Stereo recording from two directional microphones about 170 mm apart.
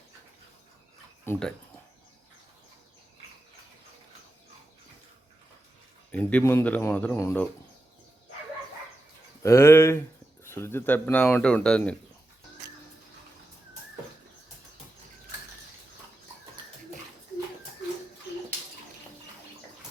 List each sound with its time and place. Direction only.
1.2 s speech: 10° left (ahead or behind)
6.1 s speech: 10° left (ahead or behind)
9.4 s speech: 15° left (ahead or behind)